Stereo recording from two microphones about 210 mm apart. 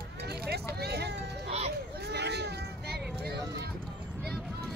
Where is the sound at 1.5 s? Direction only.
30° right (ahead or behind).